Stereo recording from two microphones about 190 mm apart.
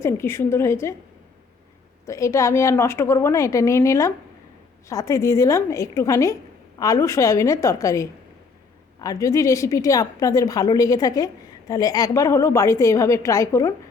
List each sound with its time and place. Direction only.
0.0 s a woman's voice: 15° left (ahead or behind)
2.0 s a woman's voice: 15° left (ahead or behind)